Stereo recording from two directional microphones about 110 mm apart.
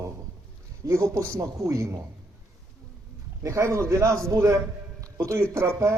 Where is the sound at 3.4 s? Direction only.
30° right (ahead or behind).